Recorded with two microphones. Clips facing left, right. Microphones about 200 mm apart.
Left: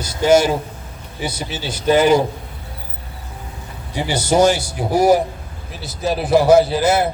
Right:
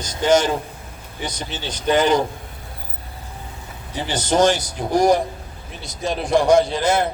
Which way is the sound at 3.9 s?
10° left (ahead or behind).